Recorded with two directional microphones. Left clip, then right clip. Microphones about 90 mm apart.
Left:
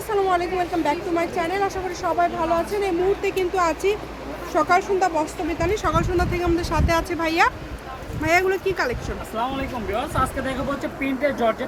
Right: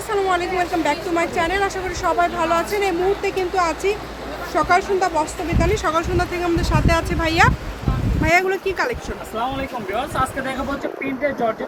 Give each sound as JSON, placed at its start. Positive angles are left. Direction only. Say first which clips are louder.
{"t": 0.1, "sound": "speech", "louder": "right 1 dB", "side_deg": -10}
{"t": 3.2, "sound": "speech", "louder": "right 1 dB", "side_deg": 15}
{"t": 4.5, "sound": "speech", "louder": "right 2 dB", "side_deg": 5}
{"t": 11.2, "sound": "speech", "louder": "even", "side_deg": 35}